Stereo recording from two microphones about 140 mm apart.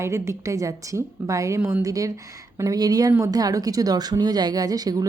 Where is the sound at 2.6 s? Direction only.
25° right (ahead or behind).